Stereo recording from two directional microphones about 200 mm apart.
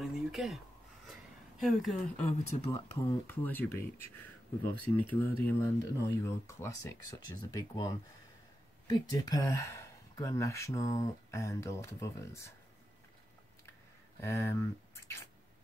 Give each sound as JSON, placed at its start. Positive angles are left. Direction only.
{"t": 0.0, "sound": "a sound", "side_deg": 0}
{"t": 1.6, "sound": "speech", "side_deg": 0}
{"t": 2.5, "sound": "speech", "side_deg": 30}
{"t": 3.1, "sound": "speech", "side_deg": 10}
{"t": 4.8, "sound": "speech", "side_deg": 10}
{"t": 14.2, "sound": "speech", "side_deg": 15}